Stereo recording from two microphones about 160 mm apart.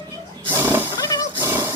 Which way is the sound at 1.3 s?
15° right (ahead or behind).